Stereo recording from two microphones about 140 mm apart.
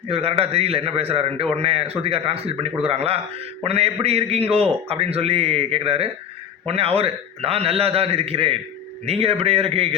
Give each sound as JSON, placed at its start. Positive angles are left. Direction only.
{"t": 0.1, "sound": "a man's voice", "side_deg": -45}